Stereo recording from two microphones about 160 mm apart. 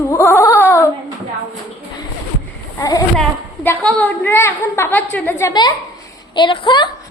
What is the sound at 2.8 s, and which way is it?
A woman's voice, 20° left (ahead or behind).